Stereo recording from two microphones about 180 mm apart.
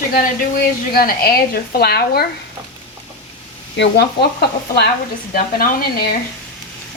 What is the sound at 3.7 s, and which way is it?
Speech, 70° left (ahead or behind).